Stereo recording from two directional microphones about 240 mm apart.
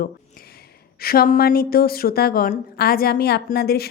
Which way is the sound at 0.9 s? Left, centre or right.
Left.